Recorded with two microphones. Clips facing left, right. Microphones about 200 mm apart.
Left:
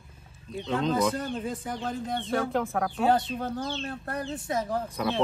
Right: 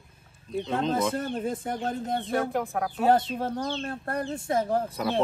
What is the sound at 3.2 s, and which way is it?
Speech, 25° right (ahead or behind).